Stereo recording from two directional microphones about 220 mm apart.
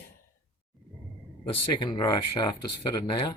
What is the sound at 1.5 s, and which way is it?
Speech, 20° left (ahead or behind).